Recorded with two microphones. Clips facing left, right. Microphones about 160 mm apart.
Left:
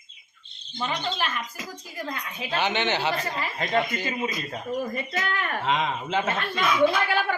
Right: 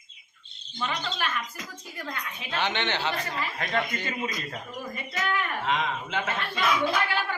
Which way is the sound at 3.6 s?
25° left (ahead or behind).